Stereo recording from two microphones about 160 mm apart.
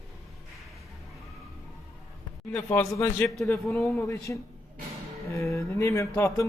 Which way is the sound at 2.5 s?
10° left (ahead or behind).